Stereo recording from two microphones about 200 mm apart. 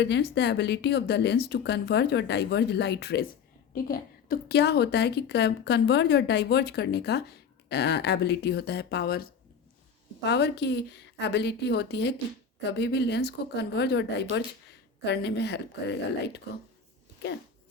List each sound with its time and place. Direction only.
0.0 s a woman's voice: 60° left (ahead or behind)